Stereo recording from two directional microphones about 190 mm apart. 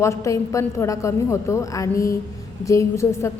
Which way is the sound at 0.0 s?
15° left (ahead or behind).